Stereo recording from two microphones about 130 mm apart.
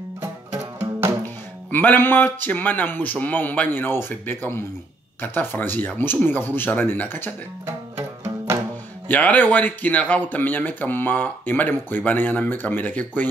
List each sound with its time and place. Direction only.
0.2 s music: 20° right (ahead or behind)
1.2 s speech: 15° left (ahead or behind)
9.0 s speech: 15° left (ahead or behind)